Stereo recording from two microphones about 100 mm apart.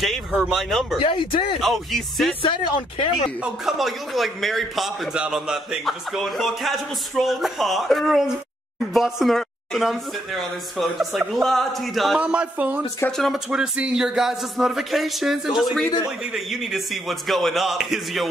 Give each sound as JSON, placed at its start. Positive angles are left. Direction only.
{"t": 0.5, "sound": "a man's voice", "side_deg": 0}
{"t": 1.0, "sound": "speech", "side_deg": 65}
{"t": 1.6, "sound": "a man's voice", "side_deg": 0}
{"t": 2.4, "sound": "speech", "side_deg": 60}
{"t": 3.4, "sound": "a man's voice", "side_deg": -5}
{"t": 12.2, "sound": "speech", "side_deg": -10}
{"t": 13.1, "sound": "a man's voice", "side_deg": 5}
{"t": 13.5, "sound": "a man's voice", "side_deg": -10}